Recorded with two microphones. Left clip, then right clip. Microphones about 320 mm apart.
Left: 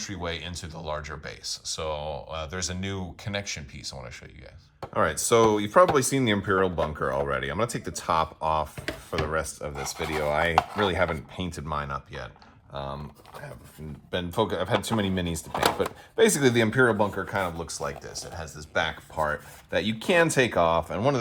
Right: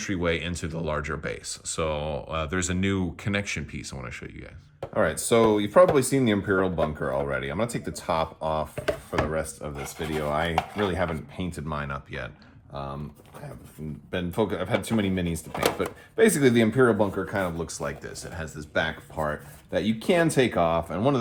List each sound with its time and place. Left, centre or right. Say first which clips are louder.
0.0 s speech: right 6 dB; centre
4.9 s speech: even; left
14.1 s speech: left 1 dB; left